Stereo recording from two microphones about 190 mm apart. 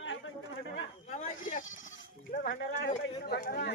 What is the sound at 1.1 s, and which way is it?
Speech, 40° left (ahead or behind).